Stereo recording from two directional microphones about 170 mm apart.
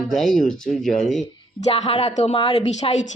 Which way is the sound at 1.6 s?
35° left (ahead or behind).